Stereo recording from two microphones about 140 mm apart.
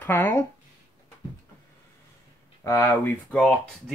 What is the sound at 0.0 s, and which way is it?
Speech, 15° left (ahead or behind).